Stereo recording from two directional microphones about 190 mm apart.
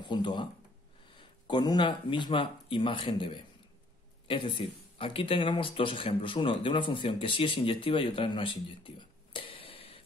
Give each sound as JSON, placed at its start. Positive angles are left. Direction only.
{"t": 0.0, "sound": "speech", "side_deg": 25}